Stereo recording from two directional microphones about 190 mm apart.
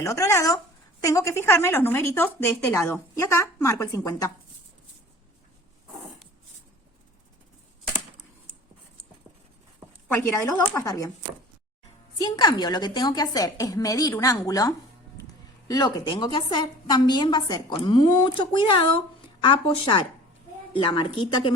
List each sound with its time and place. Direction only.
0.0 s speech: 15° left (ahead or behind)
10.1 s speech: 10° left (ahead or behind)
12.2 s a woman's voice: 20° left (ahead or behind)